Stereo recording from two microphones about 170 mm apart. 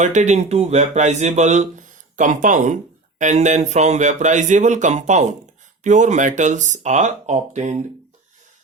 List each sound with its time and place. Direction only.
0.0 s speech: 45° right (ahead or behind)